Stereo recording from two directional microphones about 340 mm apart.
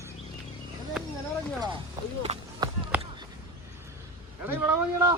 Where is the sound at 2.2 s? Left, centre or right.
Centre.